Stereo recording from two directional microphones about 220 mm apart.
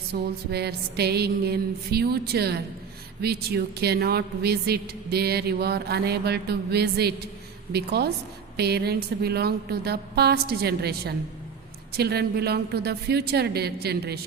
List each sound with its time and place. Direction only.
0.1 s a woman's voice: 45° right (ahead or behind)